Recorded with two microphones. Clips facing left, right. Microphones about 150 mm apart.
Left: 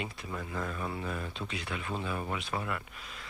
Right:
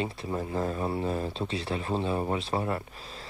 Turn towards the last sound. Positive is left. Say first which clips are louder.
# right 5 dB
turn(degrees=-30)  # may be behind; listen again after turning